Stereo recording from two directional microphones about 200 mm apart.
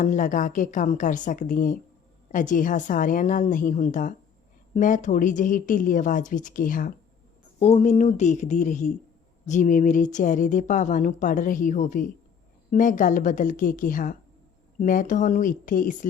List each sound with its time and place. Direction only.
0.0 s speech: 40° left (ahead or behind)
7.6 s speech: 30° left (ahead or behind)